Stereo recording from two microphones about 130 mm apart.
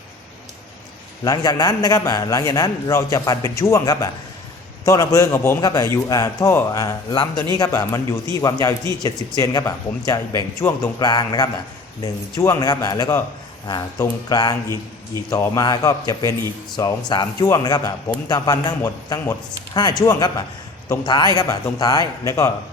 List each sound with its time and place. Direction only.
1.2 s a man's voice: 30° left (ahead or behind)